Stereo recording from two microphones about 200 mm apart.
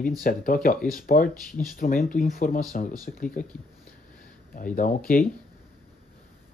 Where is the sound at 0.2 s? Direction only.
45° left (ahead or behind).